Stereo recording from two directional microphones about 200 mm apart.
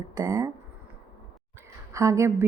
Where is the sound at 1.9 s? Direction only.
15° right (ahead or behind).